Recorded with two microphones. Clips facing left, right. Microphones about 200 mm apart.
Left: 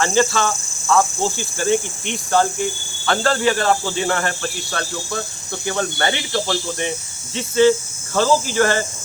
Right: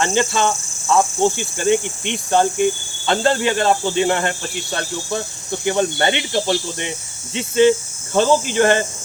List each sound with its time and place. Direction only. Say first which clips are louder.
0.0 s speech: even; 20° right (ahead or behind)